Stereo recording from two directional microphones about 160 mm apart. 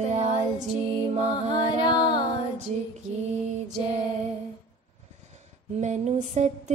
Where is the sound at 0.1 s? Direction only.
45° right (ahead or behind).